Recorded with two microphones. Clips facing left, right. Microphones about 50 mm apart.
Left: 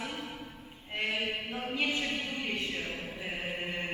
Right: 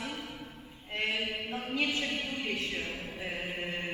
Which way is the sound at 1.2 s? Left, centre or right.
Left.